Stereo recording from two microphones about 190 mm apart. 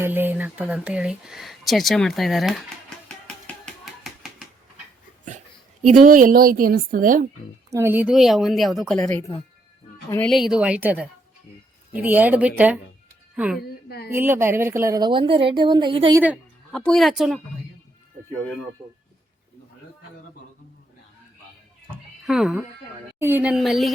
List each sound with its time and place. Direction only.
0.0 s speech: 10° right (ahead or behind)
4.0 s typewriter: centre (ahead or behind)
6.0 s a woman's voice: 45° right (ahead or behind)
7.7 s speech: 10° right (ahead or behind)
10.1 s speech: 5° left (ahead or behind)
13.6 s a sound: 55° left (ahead or behind)
14.1 s a woman's voice: 10° right (ahead or behind)
16.7 s speech: centre (ahead or behind)
22.3 s speech: 5° right (ahead or behind)